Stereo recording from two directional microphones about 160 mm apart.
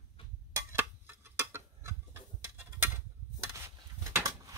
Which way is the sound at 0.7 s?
15° right (ahead or behind).